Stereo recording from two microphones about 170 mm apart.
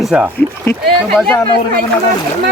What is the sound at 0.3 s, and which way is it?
Speech, 10° left (ahead or behind).